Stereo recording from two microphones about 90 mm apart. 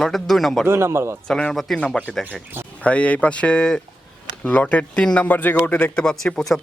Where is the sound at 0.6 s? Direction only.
30° right (ahead or behind).